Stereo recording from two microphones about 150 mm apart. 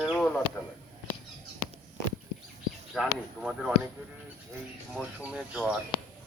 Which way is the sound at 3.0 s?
Centre (ahead or behind).